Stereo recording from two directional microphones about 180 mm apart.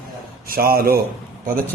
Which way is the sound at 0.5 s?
55° right (ahead or behind).